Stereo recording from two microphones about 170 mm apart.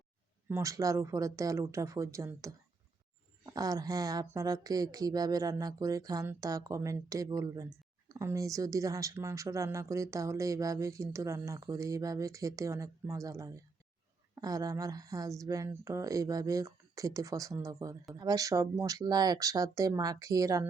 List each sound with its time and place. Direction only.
0.4 s speech: 15° right (ahead or behind)